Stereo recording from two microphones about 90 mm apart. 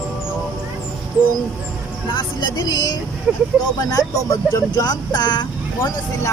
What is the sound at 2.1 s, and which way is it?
Speech, 55° left (ahead or behind).